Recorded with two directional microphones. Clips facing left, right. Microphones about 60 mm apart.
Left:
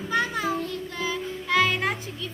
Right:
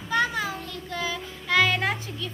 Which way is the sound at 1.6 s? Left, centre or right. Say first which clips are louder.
Right 1 dB; left.